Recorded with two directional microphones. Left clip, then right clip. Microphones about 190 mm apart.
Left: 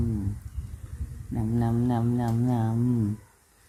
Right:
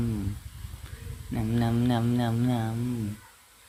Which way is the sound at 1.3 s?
Centre (ahead or behind).